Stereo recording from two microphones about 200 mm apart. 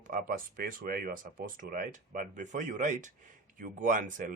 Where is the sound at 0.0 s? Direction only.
40° right (ahead or behind).